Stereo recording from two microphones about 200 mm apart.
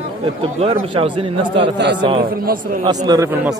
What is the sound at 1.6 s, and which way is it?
Speech, 60° right (ahead or behind).